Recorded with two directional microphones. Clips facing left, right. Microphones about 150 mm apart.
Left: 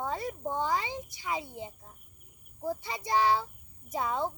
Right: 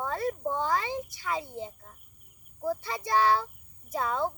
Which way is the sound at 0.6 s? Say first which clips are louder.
Right 2 dB; 15° left (ahead or behind).